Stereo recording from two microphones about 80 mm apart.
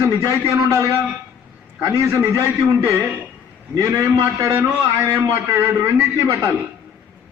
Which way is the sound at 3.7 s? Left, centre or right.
Right.